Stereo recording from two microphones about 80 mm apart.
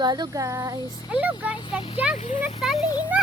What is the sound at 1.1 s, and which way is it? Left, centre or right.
Speech, centre.